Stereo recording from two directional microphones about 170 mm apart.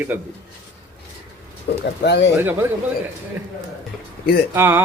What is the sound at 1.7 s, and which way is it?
Speech, 90° left.